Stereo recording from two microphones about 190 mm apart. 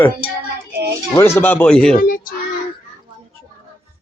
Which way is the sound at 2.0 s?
50° left (ahead or behind).